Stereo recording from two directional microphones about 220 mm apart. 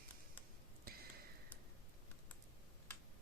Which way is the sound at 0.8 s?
45° right (ahead or behind).